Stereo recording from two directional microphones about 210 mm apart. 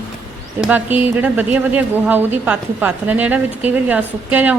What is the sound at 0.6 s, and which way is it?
Speech, 5° right (ahead or behind).